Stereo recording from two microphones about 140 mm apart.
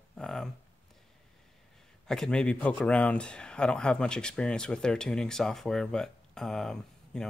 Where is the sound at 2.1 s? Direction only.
5° left (ahead or behind).